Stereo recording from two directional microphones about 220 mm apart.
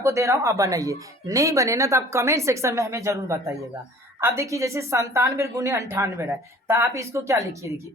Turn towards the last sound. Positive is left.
turn(degrees=-15)  # may be behind; listen again after turning